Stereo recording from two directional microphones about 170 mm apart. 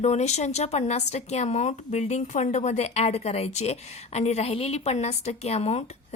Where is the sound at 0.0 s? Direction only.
40° left (ahead or behind).